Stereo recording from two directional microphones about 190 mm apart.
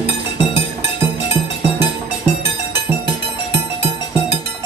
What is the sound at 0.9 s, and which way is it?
Music, 10° right (ahead or behind).